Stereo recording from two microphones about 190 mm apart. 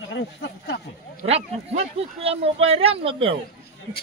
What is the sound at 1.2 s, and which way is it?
Speech, 35° right (ahead or behind).